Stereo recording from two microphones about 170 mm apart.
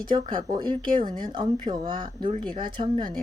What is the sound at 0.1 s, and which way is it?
Speech, 25° right (ahead or behind).